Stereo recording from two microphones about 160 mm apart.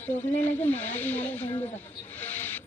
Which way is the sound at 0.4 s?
10° left (ahead or behind).